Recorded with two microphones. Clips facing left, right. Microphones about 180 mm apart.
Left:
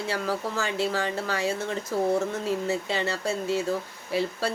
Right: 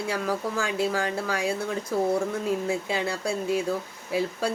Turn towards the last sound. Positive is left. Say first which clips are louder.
# even
turn(degrees=-10)  # may be behind; listen again after turning